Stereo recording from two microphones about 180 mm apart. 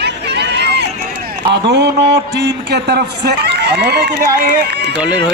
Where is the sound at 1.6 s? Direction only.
70° right (ahead or behind).